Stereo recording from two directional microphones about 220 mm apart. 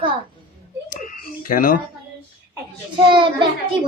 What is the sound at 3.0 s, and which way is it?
Speech, 20° right (ahead or behind).